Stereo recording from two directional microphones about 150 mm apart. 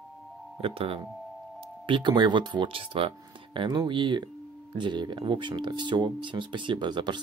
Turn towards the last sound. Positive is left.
turn(degrees=-30)  # may be behind; listen again after turning